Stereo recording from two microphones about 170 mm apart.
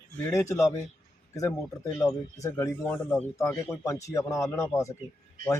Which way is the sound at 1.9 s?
20° left (ahead or behind).